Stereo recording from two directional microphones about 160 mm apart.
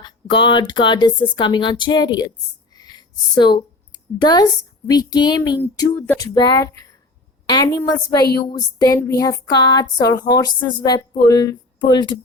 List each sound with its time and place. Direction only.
0.0 s a woman's voice: 30° left (ahead or behind)
2.7 s a sound: 25° left (ahead or behind)
4.9 s a woman's voice: 25° left (ahead or behind)